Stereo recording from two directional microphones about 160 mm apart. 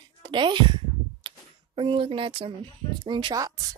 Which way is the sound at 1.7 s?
35° right (ahead or behind).